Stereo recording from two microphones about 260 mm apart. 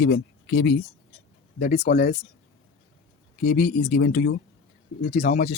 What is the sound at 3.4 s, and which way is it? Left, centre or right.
Speech, left.